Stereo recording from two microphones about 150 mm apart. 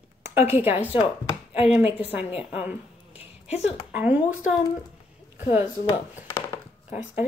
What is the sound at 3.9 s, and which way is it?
Speech, 10° right (ahead or behind).